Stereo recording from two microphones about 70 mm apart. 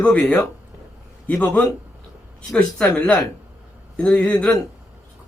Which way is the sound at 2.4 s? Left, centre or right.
Centre.